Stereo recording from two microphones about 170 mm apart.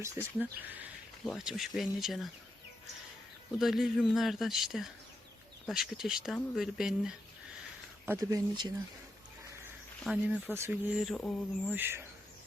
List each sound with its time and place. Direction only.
0.0 s speech: 15° right (ahead or behind)
1.2 s speech: centre (ahead or behind)
3.6 s speech: centre (ahead or behind)
8.0 s speech: 15° right (ahead or behind)
10.0 s speech: 5° right (ahead or behind)
11.1 s speech: 5° left (ahead or behind)
11.7 s speech: 10° right (ahead or behind)